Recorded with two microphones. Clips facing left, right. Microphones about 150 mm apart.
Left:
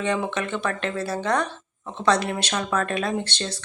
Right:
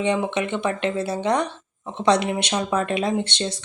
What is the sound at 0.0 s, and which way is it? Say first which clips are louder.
Speech: right 3 dB; 20° right (ahead or behind).